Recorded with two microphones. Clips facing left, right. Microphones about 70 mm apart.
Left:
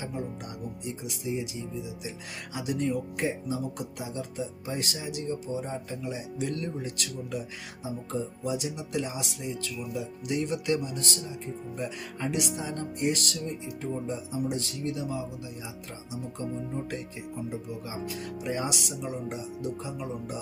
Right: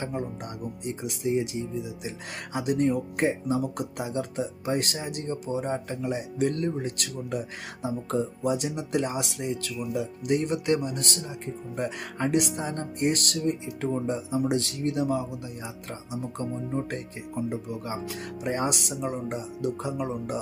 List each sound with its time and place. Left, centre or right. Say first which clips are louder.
0.0 s music: right 4 dB; right
0.9 s speech: right 6 dB; right
17.5 s speech: right 4 dB; right
19.6 s speech: right 7 dB; right